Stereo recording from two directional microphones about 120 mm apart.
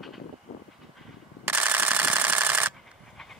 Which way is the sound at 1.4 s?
15° right (ahead or behind).